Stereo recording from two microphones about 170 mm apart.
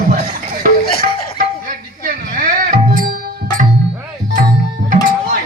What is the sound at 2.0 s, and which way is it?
Music, 55° right (ahead or behind).